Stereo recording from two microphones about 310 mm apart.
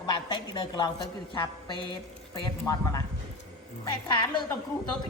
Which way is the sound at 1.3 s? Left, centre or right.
Centre.